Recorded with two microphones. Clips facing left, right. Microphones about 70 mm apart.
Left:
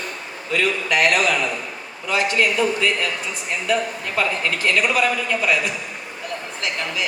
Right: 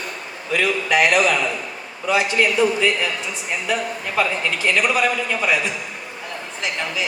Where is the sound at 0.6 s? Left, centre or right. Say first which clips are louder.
Right 1 dB; centre.